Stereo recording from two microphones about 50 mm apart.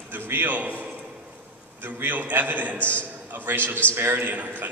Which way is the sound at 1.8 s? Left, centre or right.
Right.